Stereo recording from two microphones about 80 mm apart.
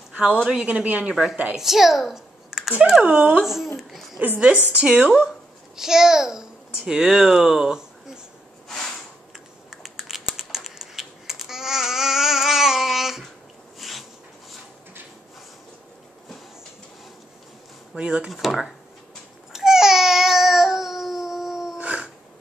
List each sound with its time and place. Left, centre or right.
0.1 s a sound: centre
0.5 s speech: centre
1.0 s speech: centre
3.4 s a child's voice: centre
4.7 s a child's voice: centre
8.6 s a sound: centre
9.7 s computer keyboard: centre
10.3 s babbling: centre
13.7 s a sound: centre
17.9 s speech: centre
18.3 s speech: centre
19.5 s baby cry: centre
21.7 s a sound: centre